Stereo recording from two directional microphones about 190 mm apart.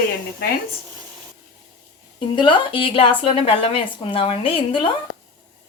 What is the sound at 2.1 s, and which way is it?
A woman's voice, 25° left (ahead or behind).